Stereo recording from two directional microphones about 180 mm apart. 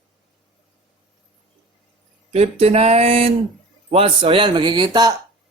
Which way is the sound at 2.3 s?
35° right (ahead or behind).